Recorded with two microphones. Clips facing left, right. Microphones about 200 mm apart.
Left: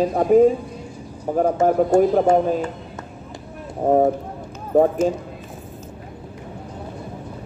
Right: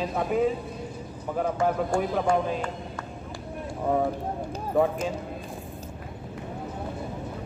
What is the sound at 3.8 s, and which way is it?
Speech, 45° left (ahead or behind).